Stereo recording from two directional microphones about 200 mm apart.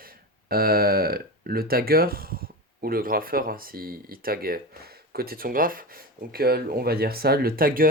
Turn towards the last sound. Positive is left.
turn(degrees=-45)  # may be behind; listen again after turning